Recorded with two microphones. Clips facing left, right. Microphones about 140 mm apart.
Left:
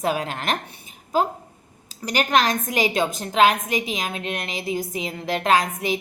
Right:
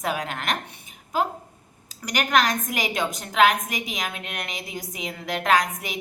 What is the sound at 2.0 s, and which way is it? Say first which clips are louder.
A woman's voice: left 2 dB; 30° left (ahead or behind).